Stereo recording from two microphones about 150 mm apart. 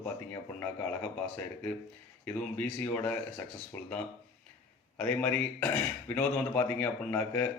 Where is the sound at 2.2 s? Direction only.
10° left (ahead or behind).